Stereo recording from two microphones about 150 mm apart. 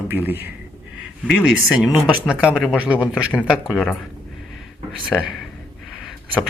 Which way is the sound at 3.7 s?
10° left (ahead or behind).